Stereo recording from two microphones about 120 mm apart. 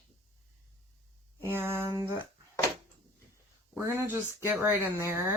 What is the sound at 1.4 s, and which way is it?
Speech, 15° right (ahead or behind).